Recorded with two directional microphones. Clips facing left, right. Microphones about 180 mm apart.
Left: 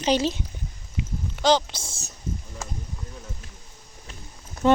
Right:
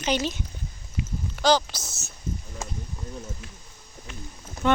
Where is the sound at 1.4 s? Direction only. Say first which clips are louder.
Left 1 dB; 25° left (ahead or behind).